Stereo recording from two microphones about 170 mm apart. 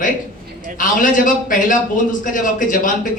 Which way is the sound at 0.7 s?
50° left (ahead or behind).